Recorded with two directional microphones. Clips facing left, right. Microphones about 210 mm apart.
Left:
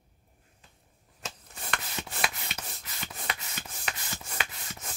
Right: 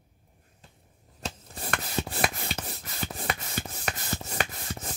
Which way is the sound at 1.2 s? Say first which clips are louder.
Right 6 dB; 35° right (ahead or behind).